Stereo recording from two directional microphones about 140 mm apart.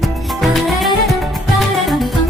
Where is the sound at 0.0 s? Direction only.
Centre (ahead or behind).